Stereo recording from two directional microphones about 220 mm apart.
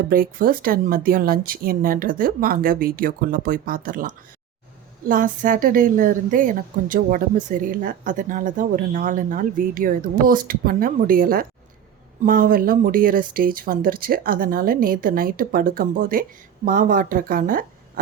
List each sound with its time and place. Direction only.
0.1 s a woman's voice: 40° right (ahead or behind)